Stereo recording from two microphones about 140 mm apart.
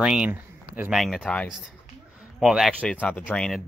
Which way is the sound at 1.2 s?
10° left (ahead or behind).